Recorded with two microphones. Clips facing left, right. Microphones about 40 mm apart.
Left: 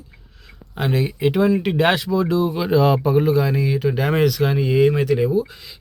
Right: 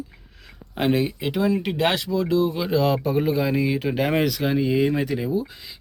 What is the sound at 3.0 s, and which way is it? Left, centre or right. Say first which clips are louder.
Speech: left 5 dB; centre.